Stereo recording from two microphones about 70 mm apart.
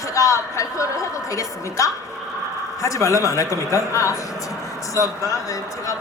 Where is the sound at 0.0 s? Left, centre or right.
Left.